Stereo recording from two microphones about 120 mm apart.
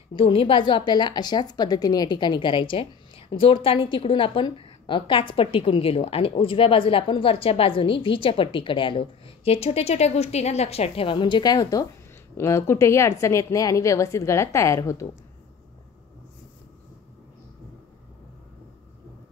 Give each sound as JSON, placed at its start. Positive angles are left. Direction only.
{"t": 0.1, "sound": "a woman's voice", "side_deg": 50}